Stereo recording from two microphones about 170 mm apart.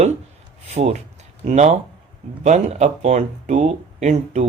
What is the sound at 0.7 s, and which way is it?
Speech, 40° right (ahead or behind).